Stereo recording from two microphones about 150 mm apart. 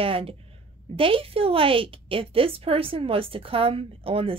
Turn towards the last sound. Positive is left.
turn(degrees=-40)  # may be behind; listen again after turning